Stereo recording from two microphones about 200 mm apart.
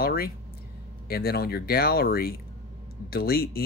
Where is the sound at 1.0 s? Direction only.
50° left (ahead or behind).